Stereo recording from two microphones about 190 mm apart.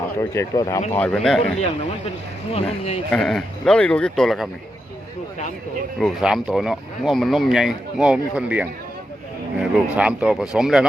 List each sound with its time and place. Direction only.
0.2 s speech: 15° left (ahead or behind)
0.9 s speech: 5° left (ahead or behind)
2.5 s speech: 30° left (ahead or behind)
3.1 s speech: centre (ahead or behind)
6.0 s speech: centre (ahead or behind)